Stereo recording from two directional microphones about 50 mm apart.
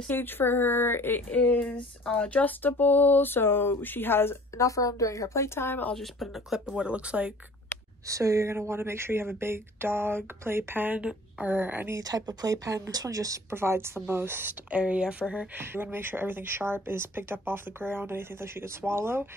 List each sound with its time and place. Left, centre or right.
0.1 s speech: left
1.3 s a sound: left
4.6 s a woman's voice: left
5.9 s speech: centre
6.5 s speech: centre
8.1 s speech: right
8.5 s speech: right
11.0 s a woman's voice: right
11.5 s a woman's voice: right
12.7 s speech: right
13.6 s speech: right
14.7 s speech: right
15.7 s speech: right